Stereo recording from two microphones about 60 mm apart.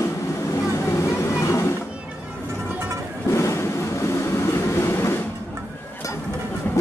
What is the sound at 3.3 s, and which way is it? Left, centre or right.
Train, left.